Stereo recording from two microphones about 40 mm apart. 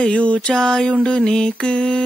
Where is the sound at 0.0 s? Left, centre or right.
Left.